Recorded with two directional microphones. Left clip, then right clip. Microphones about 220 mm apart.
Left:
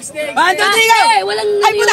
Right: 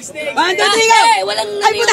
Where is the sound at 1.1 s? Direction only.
50° right (ahead or behind).